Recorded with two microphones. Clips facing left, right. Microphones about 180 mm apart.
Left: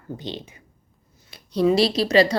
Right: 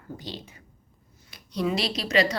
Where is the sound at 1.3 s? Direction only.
30° left (ahead or behind).